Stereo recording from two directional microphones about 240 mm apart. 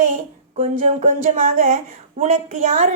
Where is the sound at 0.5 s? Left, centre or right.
Right.